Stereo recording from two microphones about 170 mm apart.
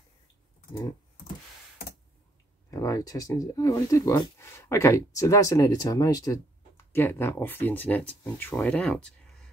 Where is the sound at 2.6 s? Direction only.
20° left (ahead or behind).